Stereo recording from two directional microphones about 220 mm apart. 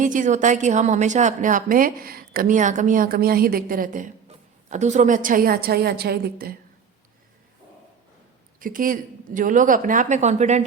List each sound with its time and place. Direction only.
0.0 s a woman's voice: 35° right (ahead or behind)
8.5 s a woman's voice: 40° right (ahead or behind)